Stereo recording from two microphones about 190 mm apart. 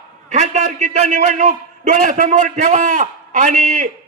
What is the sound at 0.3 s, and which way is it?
A man's voice, 35° right (ahead or behind).